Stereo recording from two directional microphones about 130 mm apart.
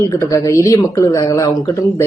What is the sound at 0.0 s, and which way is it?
Speech, 25° left (ahead or behind).